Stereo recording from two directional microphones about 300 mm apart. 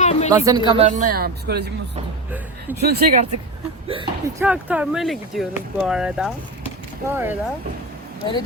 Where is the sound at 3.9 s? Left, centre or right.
Centre.